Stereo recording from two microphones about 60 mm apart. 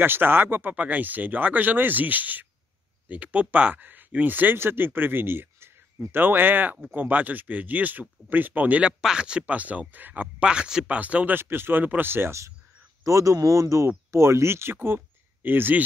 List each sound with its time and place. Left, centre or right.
0.0 s speech: right
8.8 s speech: centre; by 10.3 s right
10.4 s speech: centre
11.3 s speech: right
13.0 s speech: right